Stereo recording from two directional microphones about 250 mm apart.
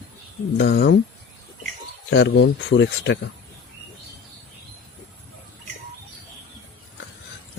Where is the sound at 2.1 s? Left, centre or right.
Left.